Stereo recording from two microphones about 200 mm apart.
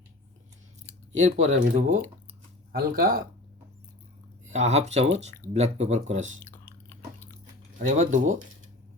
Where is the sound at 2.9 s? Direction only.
50° right (ahead or behind).